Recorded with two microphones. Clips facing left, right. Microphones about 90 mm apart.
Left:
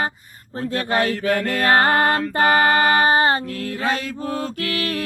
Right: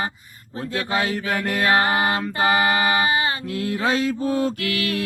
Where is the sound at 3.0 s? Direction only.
40° left (ahead or behind).